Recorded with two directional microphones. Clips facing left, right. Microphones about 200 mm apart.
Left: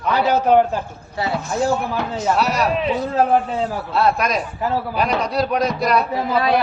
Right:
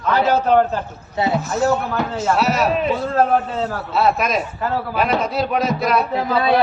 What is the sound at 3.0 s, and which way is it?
Speech, 10° left (ahead or behind).